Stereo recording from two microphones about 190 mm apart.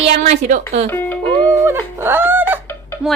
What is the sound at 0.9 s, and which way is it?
Music, 10° left (ahead or behind).